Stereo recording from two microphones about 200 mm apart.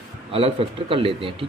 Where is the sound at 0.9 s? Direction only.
25° right (ahead or behind).